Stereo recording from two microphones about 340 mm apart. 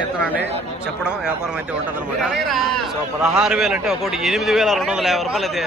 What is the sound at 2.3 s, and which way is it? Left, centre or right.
A man's voice, centre.